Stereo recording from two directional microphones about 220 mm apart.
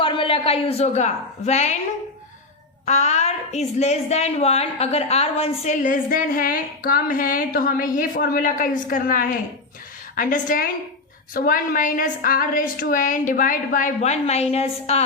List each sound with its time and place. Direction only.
0.0 s a woman's voice: 25° left (ahead or behind)
2.8 s a woman's voice: 30° left (ahead or behind)